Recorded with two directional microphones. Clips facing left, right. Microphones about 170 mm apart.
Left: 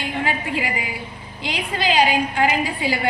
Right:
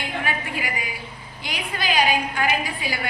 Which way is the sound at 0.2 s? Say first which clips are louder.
Left 5 dB; 25° left (ahead or behind).